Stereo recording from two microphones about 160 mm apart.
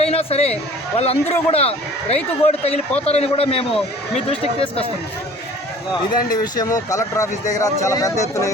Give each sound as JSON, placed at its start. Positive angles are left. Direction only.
{"t": 0.0, "sound": "a man's voice", "side_deg": 40}
{"t": 6.3, "sound": "speech", "side_deg": 25}